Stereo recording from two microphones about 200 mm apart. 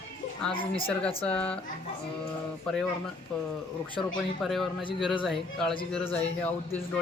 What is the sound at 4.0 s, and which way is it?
A man's voice, centre (ahead or behind).